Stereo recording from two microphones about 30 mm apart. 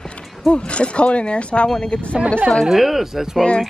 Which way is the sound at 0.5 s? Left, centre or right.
Left.